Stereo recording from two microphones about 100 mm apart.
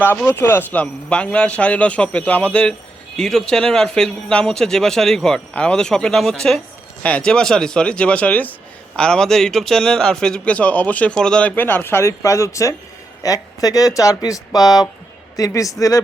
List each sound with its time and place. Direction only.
0.3 s speech: 20° left (ahead or behind)
11.5 s speech: 20° left (ahead or behind)